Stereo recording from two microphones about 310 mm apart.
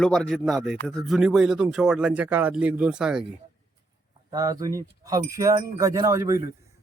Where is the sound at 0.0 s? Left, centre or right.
Centre.